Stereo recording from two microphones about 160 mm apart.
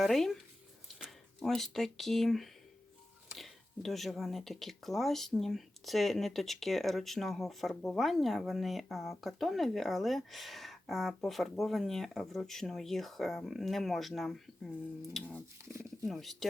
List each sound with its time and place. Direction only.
0.0 s speech: centre (ahead or behind)
15.7 s speech: 15° right (ahead or behind)
16.0 s speech: centre (ahead or behind)